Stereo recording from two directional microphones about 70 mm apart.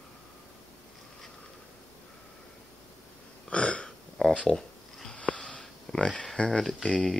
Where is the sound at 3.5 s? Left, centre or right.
Centre.